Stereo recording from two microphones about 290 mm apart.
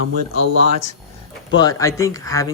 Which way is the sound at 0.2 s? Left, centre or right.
Right.